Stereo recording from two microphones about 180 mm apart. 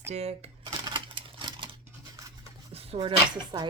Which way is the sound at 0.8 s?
25° right (ahead or behind).